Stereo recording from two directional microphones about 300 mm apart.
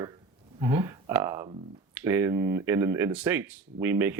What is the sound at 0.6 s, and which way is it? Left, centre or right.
Speech, centre.